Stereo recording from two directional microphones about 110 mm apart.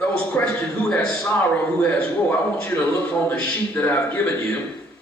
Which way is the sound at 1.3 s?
15° left (ahead or behind).